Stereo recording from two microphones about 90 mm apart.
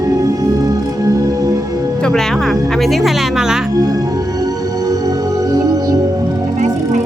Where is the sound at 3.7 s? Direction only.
40° right (ahead or behind).